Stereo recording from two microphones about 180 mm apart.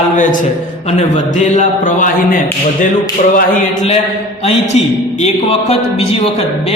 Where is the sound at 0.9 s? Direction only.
40° left (ahead or behind).